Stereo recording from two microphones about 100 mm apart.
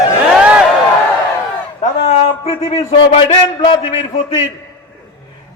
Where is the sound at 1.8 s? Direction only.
90° left; by 3.7 s 55° left (ahead or behind).